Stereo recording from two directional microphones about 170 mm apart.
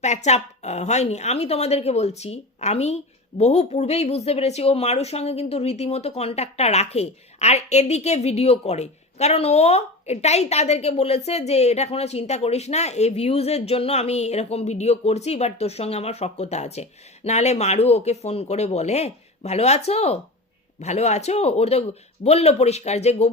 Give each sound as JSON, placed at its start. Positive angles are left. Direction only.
{"t": 0.0, "sound": "speech", "side_deg": 40}